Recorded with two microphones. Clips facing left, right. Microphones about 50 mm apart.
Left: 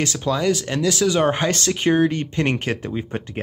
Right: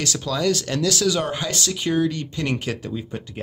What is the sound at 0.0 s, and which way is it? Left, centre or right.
Speech, left.